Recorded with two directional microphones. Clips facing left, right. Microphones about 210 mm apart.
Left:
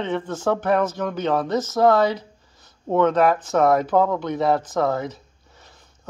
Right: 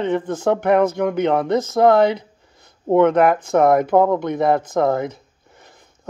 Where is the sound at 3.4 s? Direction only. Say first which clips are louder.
Right 3 dB; 55° right (ahead or behind).